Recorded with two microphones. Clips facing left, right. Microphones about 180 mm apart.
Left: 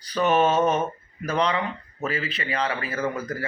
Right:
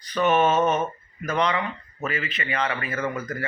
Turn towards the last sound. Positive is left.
turn(degrees=30)  # may be behind; listen again after turning